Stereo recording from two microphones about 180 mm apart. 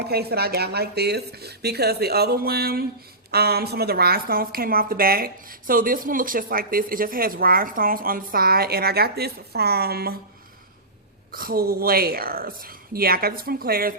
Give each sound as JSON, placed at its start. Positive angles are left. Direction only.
{"t": 0.1, "sound": "a woman's voice", "side_deg": -60}
{"t": 11.3, "sound": "a woman's voice", "side_deg": -55}